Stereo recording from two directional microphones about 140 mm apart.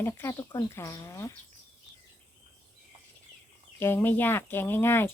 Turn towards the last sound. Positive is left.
turn(degrees=15)  # may be behind; listen again after turning